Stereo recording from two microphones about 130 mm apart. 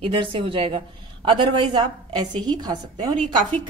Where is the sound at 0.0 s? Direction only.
40° right (ahead or behind).